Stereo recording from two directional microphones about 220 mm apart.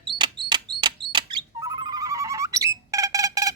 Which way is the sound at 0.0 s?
20° right (ahead or behind).